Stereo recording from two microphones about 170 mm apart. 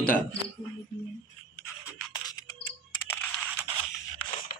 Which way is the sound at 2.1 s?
25° left (ahead or behind).